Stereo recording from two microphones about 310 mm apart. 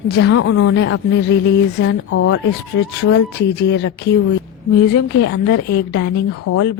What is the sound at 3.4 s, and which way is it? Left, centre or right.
Speech, left.